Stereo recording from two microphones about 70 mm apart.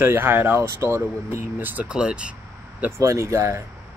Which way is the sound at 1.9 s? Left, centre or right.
Centre.